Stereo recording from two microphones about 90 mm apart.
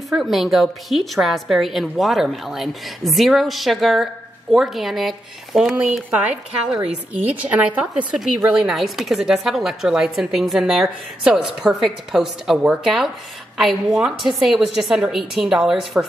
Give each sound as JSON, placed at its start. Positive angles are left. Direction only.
{"t": 0.1, "sound": "a woman's voice", "side_deg": 0}
{"t": 6.0, "sound": "a woman's voice", "side_deg": -15}